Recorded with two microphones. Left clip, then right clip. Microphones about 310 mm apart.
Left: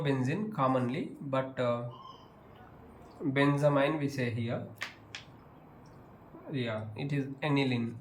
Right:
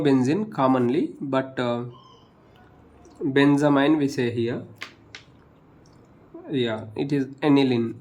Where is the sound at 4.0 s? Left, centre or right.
Centre.